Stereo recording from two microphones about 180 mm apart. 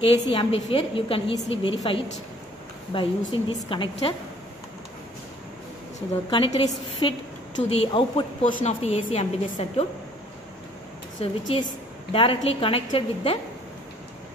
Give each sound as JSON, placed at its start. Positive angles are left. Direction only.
{"t": 0.0, "sound": "a woman's voice", "side_deg": 25}
{"t": 6.3, "sound": "a woman's voice", "side_deg": 25}
{"t": 11.2, "sound": "a woman's voice", "side_deg": 35}